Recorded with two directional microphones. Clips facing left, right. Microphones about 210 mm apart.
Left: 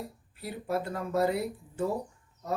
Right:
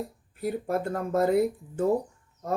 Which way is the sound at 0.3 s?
50° right (ahead or behind).